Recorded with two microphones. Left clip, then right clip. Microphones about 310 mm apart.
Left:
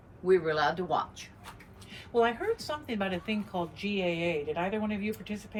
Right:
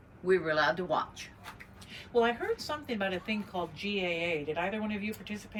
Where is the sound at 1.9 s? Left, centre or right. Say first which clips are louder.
Left 1 dB; left.